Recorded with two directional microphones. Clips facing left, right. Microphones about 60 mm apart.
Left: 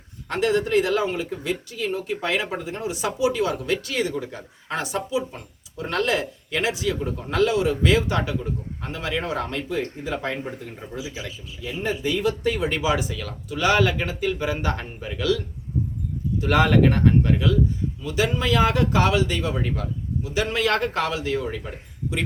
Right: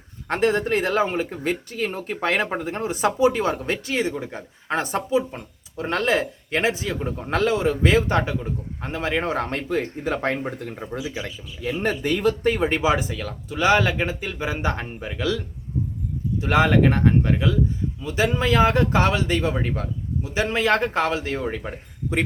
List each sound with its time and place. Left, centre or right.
0.3 s speech: right
16.4 s speech: right